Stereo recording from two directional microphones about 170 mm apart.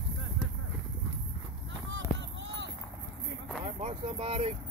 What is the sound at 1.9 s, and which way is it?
Run, 90° right.